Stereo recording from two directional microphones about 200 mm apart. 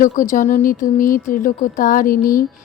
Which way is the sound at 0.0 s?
40° left (ahead or behind).